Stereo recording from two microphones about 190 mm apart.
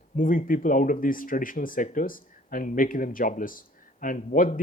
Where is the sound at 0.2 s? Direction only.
45° left (ahead or behind).